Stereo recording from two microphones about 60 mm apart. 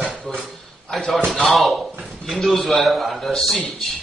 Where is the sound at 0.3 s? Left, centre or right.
Centre.